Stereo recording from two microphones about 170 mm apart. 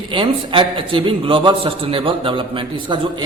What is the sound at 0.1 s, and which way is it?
A man's voice, 30° right (ahead or behind).